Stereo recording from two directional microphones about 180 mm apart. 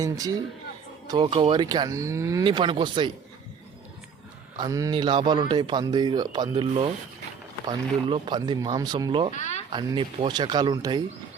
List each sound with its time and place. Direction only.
0.0 s speech: 20° right (ahead or behind)
4.5 s speech: 20° right (ahead or behind)
8.1 s speech: 25° right (ahead or behind)
9.3 s a sound: 40° left (ahead or behind)
9.7 s speech: 25° right (ahead or behind)